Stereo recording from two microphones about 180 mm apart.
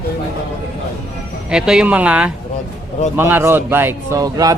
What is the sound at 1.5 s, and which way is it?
Speech, 5° right (ahead or behind).